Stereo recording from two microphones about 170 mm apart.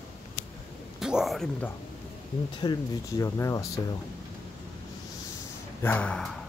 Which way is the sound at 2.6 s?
20° left (ahead or behind).